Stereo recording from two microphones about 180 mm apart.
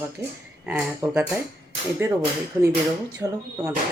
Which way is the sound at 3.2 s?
20° right (ahead or behind).